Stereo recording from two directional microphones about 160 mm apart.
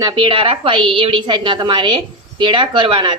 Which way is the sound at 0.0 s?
30° right (ahead or behind).